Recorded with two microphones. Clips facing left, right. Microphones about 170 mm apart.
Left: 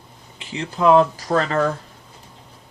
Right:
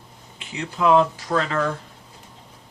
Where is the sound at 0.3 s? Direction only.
35° left (ahead or behind).